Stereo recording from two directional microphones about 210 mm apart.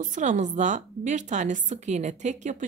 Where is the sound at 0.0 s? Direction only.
35° right (ahead or behind).